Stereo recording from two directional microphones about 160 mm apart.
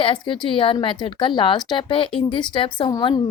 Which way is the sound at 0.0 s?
30° left (ahead or behind).